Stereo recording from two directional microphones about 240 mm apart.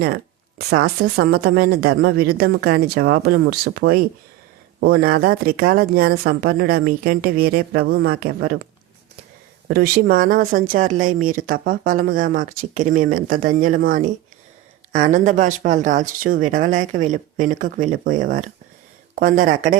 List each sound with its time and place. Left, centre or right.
0.7 s speech: right
9.6 s speech: right